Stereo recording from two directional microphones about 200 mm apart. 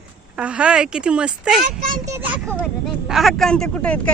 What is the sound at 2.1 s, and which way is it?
A child's voice, 10° right (ahead or behind).